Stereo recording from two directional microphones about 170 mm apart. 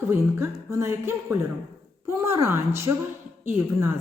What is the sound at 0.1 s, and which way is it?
A woman's voice, 15° right (ahead or behind).